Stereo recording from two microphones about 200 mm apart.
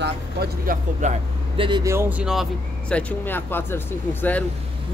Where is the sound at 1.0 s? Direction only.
35° right (ahead or behind).